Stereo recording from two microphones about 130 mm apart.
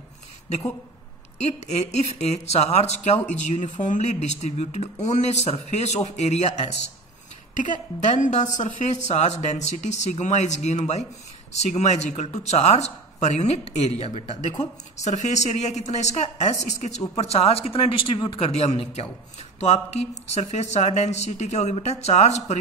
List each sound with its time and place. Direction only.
1.4 s speech: 60° left (ahead or behind)
7.5 s a woman's voice: 75° left (ahead or behind); by 18.4 s 35° left (ahead or behind)
18.4 s speech: 50° left (ahead or behind)